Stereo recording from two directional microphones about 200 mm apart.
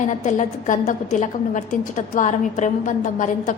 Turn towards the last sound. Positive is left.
turn(degrees=40)  # may be behind; listen again after turning